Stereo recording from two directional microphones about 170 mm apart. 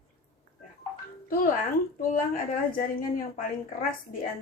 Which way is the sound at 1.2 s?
55° left (ahead or behind).